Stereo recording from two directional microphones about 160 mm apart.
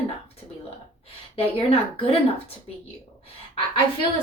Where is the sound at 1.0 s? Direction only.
35° left (ahead or behind).